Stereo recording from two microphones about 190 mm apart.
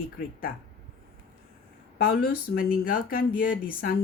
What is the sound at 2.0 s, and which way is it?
Speech, 50° left (ahead or behind).